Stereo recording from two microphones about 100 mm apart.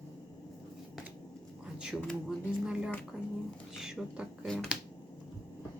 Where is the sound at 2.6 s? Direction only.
10° right (ahead or behind).